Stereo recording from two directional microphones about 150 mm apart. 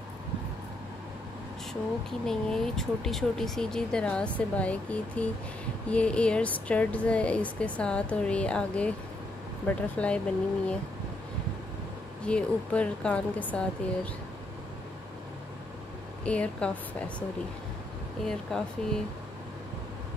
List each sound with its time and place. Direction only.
1.7 s speech: 5° left (ahead or behind)
12.3 s speech: 10° left (ahead or behind)
16.3 s speech: 5° left (ahead or behind)
18.2 s speech: 5° left (ahead or behind)